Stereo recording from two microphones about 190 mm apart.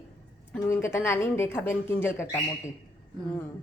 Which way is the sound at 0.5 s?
15° left (ahead or behind).